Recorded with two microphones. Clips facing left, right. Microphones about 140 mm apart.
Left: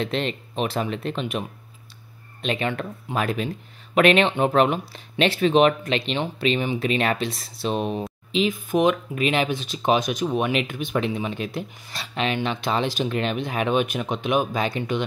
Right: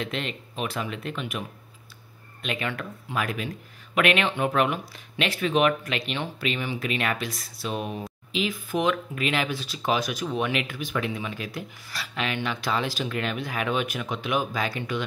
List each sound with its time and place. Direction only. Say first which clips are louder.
0.0 s speech: left 6 dB; 30° left (ahead or behind)
2.4 s speech: left 5 dB; 25° left (ahead or behind)